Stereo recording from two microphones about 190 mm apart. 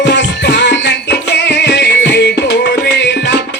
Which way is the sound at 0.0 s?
70° left (ahead or behind).